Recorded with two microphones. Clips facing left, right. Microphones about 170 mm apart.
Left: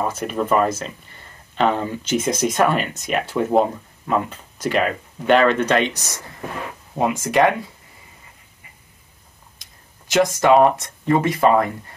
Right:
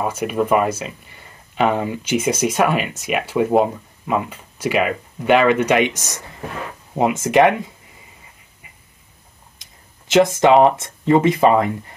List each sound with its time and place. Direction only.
0.0 s speech: 10° right (ahead or behind)
9.6 s speech: 20° right (ahead or behind)